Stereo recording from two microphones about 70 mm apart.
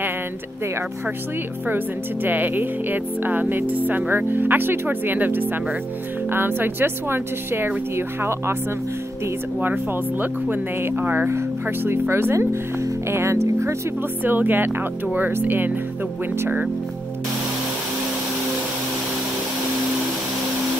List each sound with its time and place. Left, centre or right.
2.2 s speech: right
10.2 s speech: right
14.2 s speech: right